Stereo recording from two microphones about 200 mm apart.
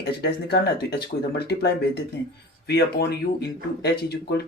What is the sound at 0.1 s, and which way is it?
Speech, 50° left (ahead or behind).